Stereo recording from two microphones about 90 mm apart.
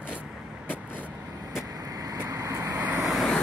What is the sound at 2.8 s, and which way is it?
Vehicle, 20° right (ahead or behind).